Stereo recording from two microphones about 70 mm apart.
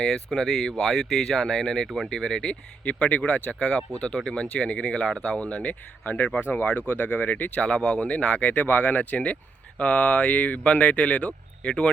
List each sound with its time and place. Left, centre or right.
0.0 s speech: centre